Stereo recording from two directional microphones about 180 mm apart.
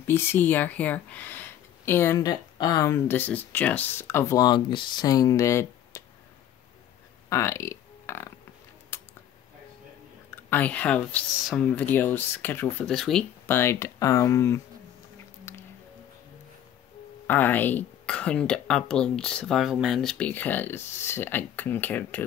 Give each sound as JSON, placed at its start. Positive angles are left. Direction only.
{"t": 0.0, "sound": "speech", "side_deg": 10}
{"t": 7.2, "sound": "speech", "side_deg": 15}
{"t": 8.9, "sound": "a sound", "side_deg": 15}
{"t": 10.5, "sound": "speech", "side_deg": 10}
{"t": 13.6, "sound": "speech", "side_deg": 15}
{"t": 17.3, "sound": "speech", "side_deg": 10}